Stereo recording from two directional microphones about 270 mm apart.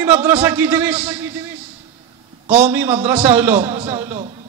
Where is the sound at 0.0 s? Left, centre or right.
Centre.